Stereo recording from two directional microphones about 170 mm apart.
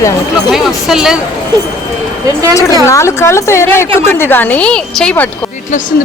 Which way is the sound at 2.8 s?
15° left (ahead or behind).